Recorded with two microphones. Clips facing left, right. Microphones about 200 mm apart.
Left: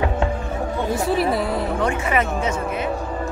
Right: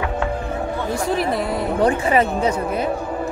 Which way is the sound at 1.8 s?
35° right (ahead or behind).